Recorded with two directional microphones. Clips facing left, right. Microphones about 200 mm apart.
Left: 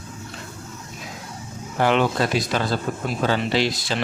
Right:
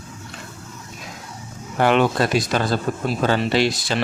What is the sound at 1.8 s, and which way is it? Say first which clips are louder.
Speech: right 2 dB; 55° right (ahead or behind).